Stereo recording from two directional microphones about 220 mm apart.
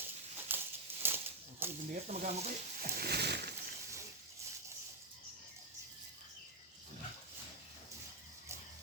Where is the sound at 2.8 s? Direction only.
45° right (ahead or behind).